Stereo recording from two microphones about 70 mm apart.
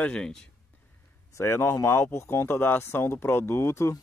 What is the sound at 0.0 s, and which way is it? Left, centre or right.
Speech, centre.